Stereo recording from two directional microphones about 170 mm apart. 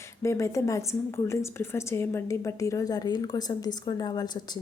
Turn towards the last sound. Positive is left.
turn(degrees=25)  # may be behind; listen again after turning